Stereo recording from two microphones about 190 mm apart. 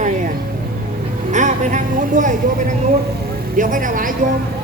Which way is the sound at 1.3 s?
40° right (ahead or behind).